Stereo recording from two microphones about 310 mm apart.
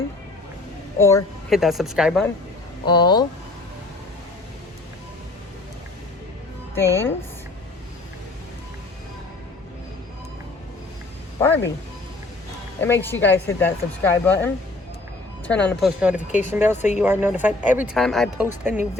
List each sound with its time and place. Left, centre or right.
0.9 s speech: centre
2.8 s speech: centre
6.7 s speech: centre
11.4 s speech: centre
12.8 s speech: centre
16.7 s speech: left
17.0 s speech: centre